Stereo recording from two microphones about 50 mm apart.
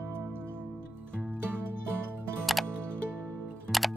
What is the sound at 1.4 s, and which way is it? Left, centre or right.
Music, right.